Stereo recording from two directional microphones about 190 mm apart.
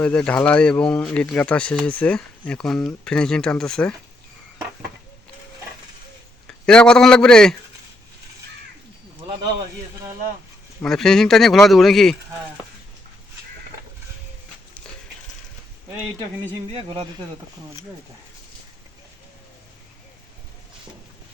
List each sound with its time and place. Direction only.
0.0 s speech: 5° left (ahead or behind)
6.5 s a man's voice: 5° left (ahead or behind)
10.8 s speech: centre (ahead or behind)
16.6 s speech: 30° right (ahead or behind)